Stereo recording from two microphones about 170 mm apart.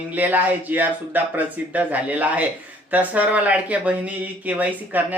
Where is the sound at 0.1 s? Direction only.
10° right (ahead or behind).